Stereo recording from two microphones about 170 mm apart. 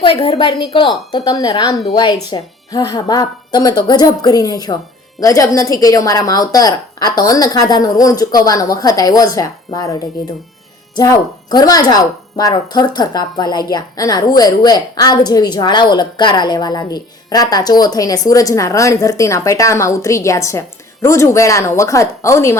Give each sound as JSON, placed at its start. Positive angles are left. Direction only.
{"t": 0.0, "sound": "speech", "side_deg": 30}